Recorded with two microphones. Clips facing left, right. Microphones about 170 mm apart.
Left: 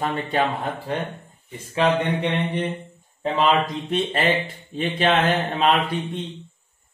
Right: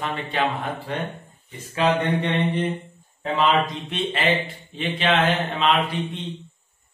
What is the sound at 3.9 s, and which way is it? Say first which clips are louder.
Speech: left 3 dB; 40° left (ahead or behind).